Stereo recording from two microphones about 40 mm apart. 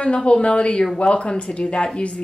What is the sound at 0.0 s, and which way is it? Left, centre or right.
A woman's voice, left.